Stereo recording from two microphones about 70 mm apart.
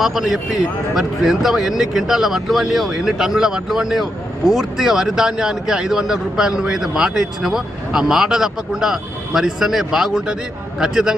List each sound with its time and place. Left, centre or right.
0.0 s speech: centre